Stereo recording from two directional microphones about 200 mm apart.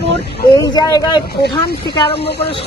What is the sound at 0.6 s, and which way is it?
Speech, 20° left (ahead or behind).